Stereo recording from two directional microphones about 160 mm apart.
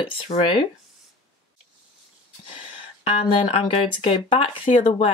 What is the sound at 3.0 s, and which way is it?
Speech, 35° left (ahead or behind).